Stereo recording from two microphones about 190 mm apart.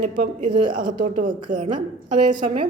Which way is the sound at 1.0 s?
40° right (ahead or behind).